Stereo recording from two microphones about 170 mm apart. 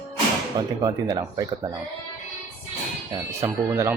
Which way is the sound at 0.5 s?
20° right (ahead or behind).